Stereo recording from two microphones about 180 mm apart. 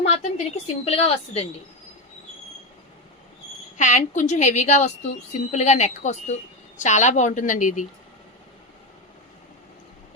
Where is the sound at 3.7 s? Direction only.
40° left (ahead or behind).